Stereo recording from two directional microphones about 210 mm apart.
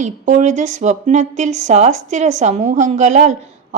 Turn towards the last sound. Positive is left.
turn(degrees=-35)  # may be behind; listen again after turning